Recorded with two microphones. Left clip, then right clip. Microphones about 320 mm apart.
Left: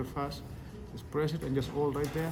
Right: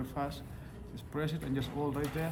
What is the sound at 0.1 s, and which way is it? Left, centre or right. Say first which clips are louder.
A man's voice: left 1 dB; centre.